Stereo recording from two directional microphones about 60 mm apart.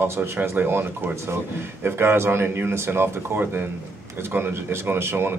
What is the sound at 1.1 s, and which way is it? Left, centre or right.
Speech, right.